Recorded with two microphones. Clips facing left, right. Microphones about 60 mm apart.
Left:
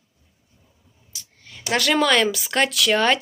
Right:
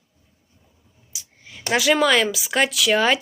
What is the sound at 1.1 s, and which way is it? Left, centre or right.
Clicking, centre.